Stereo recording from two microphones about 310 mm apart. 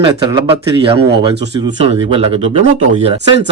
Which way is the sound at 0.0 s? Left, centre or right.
Centre.